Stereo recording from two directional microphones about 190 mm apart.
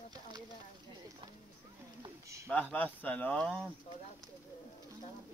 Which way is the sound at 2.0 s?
20° right (ahead or behind).